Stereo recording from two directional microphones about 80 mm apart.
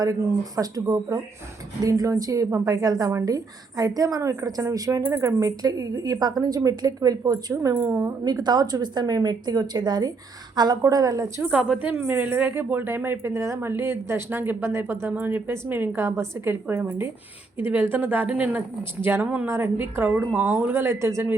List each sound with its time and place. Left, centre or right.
0.0 s speech: right
8.2 s a woman's voice: right
10.8 s speech: right
11.8 s a woman's voice: right